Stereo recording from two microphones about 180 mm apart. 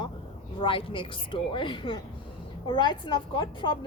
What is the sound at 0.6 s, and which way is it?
A woman's voice, 30° left (ahead or behind).